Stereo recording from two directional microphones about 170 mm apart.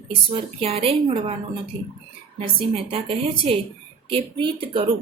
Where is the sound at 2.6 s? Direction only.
35° right (ahead or behind).